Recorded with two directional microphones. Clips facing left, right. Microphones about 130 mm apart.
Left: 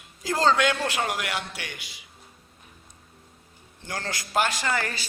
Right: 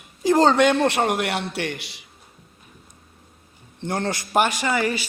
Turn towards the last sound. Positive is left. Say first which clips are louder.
# right 6 dB
turn(degrees=-15)  # may be behind; listen again after turning